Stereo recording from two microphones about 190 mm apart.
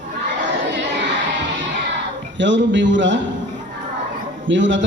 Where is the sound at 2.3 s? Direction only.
75° right (ahead or behind).